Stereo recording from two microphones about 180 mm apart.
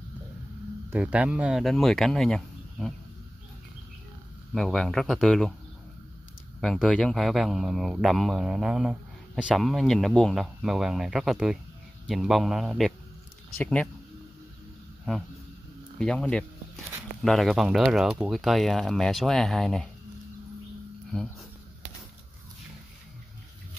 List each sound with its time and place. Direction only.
0.8 s speech: 5° right (ahead or behind)
4.6 s speech: centre (ahead or behind)
6.6 s speech: 5° left (ahead or behind)
16.0 s speech: 5° left (ahead or behind)
21.1 s speech: 5° left (ahead or behind)